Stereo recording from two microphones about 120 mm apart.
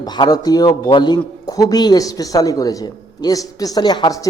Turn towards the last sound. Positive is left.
turn(degrees=35)  # may be behind; listen again after turning